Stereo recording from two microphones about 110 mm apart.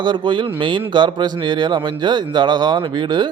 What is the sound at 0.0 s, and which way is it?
Speech, 45° right (ahead or behind).